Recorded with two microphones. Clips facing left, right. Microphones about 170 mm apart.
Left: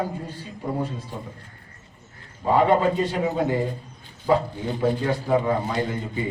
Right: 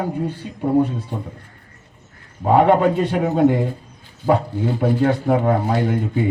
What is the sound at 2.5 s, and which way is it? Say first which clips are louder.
A man's voice: right 5 dB; 60° right (ahead or behind).